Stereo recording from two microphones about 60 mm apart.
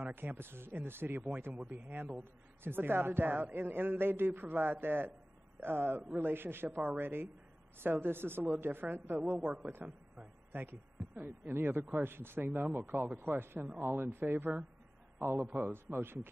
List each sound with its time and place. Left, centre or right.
0.0 s a man's voice: right
10.5 s a man's voice: right